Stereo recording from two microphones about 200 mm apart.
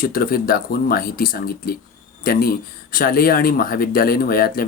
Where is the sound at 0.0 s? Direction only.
45° left (ahead or behind).